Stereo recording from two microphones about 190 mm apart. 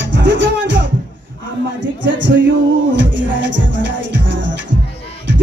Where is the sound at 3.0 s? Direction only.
70° right (ahead or behind).